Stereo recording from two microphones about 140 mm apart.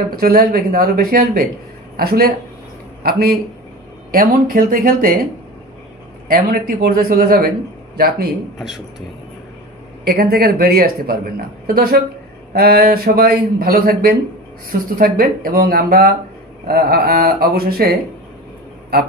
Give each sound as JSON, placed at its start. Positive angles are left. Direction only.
{"t": 0.1, "sound": "speech", "side_deg": -90}
{"t": 6.2, "sound": "speech", "side_deg": -90}
{"t": 10.0, "sound": "a woman's voice", "side_deg": -90}